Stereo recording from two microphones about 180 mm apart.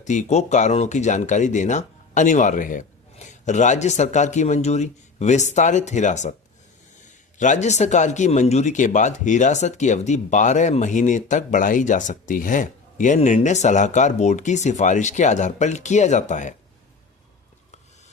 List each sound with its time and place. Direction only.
0.0 s speech: 40° left (ahead or behind)
7.3 s speech: 40° left (ahead or behind)